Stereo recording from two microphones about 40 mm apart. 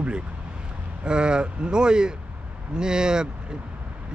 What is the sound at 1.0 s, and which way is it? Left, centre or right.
Speech, right.